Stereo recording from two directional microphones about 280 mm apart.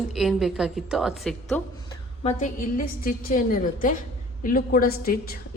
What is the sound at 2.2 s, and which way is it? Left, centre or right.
A woman's voice, left.